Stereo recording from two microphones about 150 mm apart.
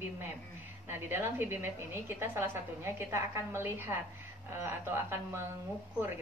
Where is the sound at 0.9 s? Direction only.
15° right (ahead or behind).